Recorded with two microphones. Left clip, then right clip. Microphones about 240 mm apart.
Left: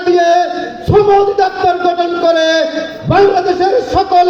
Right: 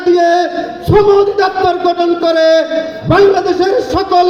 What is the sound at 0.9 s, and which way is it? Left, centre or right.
Speech, right.